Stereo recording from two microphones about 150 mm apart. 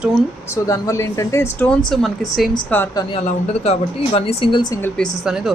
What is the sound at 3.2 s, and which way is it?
Speech, 45° left (ahead or behind).